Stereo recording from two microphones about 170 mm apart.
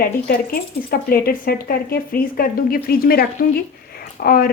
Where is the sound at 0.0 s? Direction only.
60° left (ahead or behind).